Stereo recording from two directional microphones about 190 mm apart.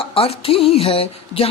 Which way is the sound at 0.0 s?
30° left (ahead or behind).